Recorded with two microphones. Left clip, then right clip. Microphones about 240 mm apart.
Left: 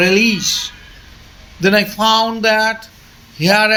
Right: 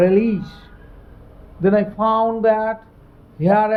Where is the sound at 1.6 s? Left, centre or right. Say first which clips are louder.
Left 3 dB; centre.